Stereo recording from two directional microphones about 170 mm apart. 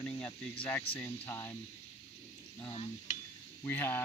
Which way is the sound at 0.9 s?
10° left (ahead or behind).